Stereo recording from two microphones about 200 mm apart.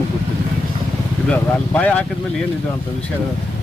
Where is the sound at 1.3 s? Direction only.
5° left (ahead or behind).